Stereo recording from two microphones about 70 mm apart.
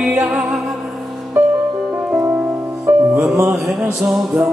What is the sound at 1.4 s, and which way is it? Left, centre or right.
Music, right.